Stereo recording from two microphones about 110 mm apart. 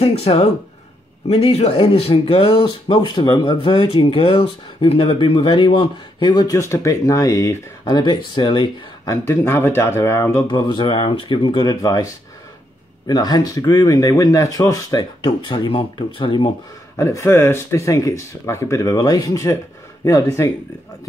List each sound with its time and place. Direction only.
0.0 s speech: 70° left (ahead or behind); by 6.5 s 45° left (ahead or behind)
6.5 s speech: 25° left (ahead or behind)
8.0 s speech: 45° left (ahead or behind)
9.1 s speech: 20° left (ahead or behind)
10.5 s speech: 45° left (ahead or behind)
16.9 s speech: 25° left (ahead or behind)